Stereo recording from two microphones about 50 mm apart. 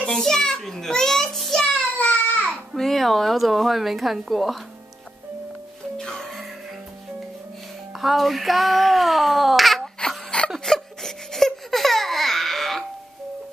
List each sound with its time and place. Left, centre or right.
0.0 s a child's voice: centre
1.6 s child singing: centre
2.0 s baby cry: left
2.7 s speech: centre
5.9 s music: centre
7.9 s speech: centre
10.0 s a sound: left
10.6 s laughter: centre